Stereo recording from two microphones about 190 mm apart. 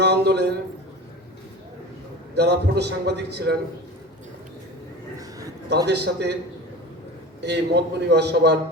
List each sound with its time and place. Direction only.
0.0 s a sound: 60° right (ahead or behind)
2.3 s a man's voice: 60° right (ahead or behind)
5.6 s a man's voice: 65° right (ahead or behind)
7.4 s a man's voice: 60° right (ahead or behind)